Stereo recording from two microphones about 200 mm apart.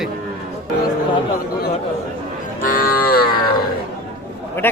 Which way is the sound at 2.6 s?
45° left (ahead or behind).